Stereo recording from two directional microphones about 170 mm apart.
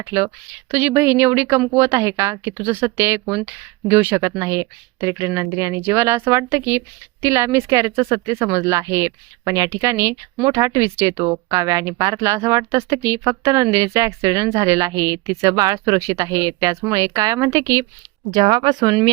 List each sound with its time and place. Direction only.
0.0 s speech: 15° right (ahead or behind)